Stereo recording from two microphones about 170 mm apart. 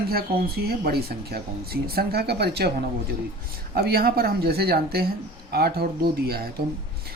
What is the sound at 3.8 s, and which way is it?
Speech, 65° right (ahead or behind).